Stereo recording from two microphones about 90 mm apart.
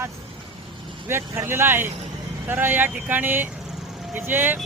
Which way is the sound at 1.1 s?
25° right (ahead or behind).